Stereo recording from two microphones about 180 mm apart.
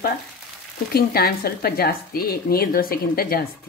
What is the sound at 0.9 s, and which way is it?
Speech, 60° left (ahead or behind).